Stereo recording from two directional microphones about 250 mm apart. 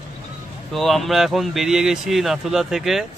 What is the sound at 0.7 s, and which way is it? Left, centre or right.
Speech, centre.